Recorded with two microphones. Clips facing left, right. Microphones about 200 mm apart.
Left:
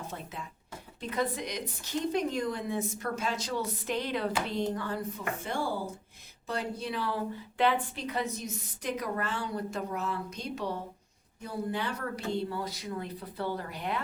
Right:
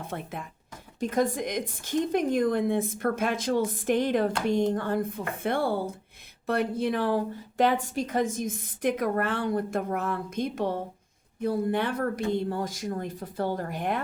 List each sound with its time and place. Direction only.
0.0 s a woman's voice: 55° right (ahead or behind)